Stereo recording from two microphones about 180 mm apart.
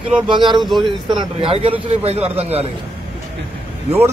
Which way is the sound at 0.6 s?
Centre (ahead or behind).